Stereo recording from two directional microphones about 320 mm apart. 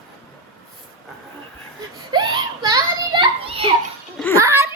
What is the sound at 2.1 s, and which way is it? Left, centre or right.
Children playing, centre.